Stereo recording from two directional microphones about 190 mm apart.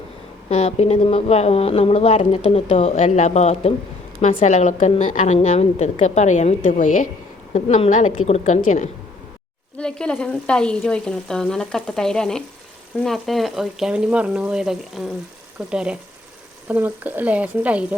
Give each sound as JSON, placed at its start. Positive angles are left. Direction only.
{"t": 0.4, "sound": "speech", "side_deg": 35}
{"t": 9.7, "sound": "a woman's voice", "side_deg": 5}